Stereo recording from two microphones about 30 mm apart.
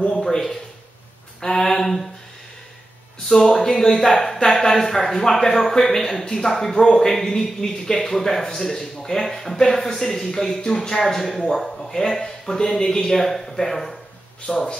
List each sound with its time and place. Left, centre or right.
0.0 s a sound: left
3.3 s speech: centre
14.5 s speech: left